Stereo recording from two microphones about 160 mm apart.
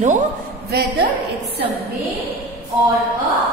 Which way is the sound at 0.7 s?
75° right (ahead or behind).